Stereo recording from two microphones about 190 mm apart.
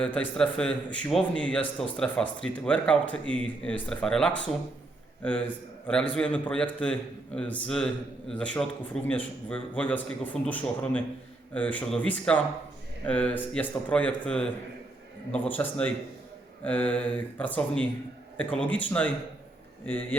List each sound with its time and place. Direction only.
0.0 s a man's voice: 5° left (ahead or behind)
5.9 s a man's voice: 5° left (ahead or behind)